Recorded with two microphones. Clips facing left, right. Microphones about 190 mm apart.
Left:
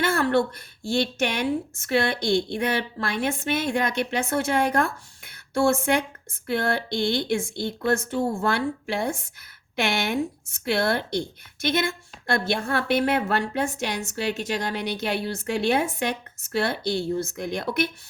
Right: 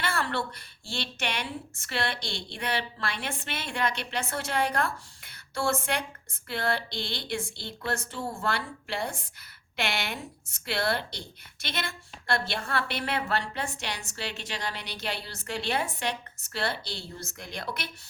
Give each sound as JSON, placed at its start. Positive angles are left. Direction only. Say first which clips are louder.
{"t": 0.0, "sound": "a woman's voice", "louder": "left 9 dB", "side_deg": 45}